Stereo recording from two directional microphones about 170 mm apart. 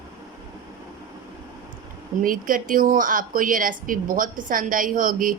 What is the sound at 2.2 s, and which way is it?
A woman's voice, 55° right (ahead or behind).